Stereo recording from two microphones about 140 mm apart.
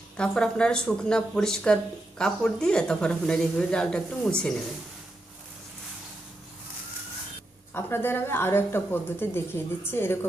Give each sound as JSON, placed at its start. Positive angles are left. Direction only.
{"t": 0.2, "sound": "speech", "side_deg": 5}
{"t": 7.7, "sound": "speech", "side_deg": 15}